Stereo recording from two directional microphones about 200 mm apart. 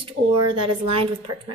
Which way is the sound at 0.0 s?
25° right (ahead or behind).